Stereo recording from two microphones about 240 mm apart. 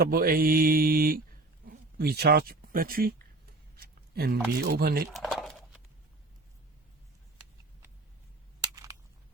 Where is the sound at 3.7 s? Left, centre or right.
Right.